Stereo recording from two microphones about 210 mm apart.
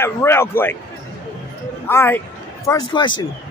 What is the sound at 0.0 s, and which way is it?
Speech, 10° left (ahead or behind).